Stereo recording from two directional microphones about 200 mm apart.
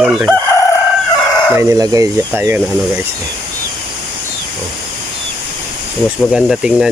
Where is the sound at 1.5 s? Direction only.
15° right (ahead or behind).